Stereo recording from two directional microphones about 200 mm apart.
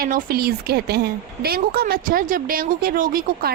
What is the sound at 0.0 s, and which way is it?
A woman's voice, 45° right (ahead or behind).